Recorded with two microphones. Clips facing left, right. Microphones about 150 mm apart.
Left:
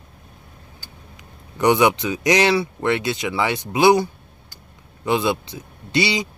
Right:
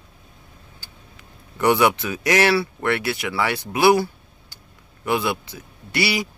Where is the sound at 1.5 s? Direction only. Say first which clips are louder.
Left 1 dB; 20° left (ahead or behind).